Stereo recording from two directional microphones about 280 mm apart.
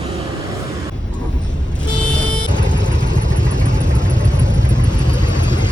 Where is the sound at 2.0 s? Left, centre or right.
Centre.